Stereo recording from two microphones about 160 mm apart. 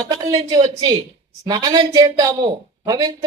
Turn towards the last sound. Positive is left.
turn(degrees=-25)  # may be behind; listen again after turning